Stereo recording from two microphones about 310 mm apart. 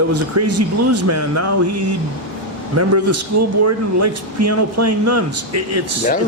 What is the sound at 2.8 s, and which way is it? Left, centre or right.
Speech, right.